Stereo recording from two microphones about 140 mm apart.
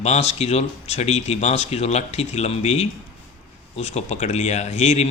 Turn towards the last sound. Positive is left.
turn(degrees=50)  # may be behind; listen again after turning